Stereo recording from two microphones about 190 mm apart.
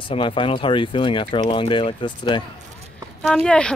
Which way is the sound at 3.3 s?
5° left (ahead or behind).